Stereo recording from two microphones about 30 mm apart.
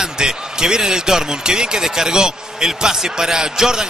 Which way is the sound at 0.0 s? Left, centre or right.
Right.